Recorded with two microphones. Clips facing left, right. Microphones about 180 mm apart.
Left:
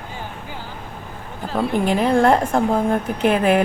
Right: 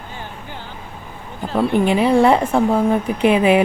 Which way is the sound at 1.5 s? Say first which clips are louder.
Right 3 dB; 5° right (ahead or behind).